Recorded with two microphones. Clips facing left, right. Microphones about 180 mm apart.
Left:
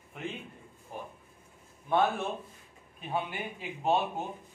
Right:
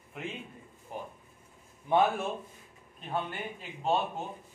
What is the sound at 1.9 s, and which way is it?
Speech, 20° right (ahead or behind).